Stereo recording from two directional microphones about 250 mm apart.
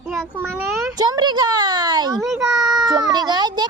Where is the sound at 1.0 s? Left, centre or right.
Centre.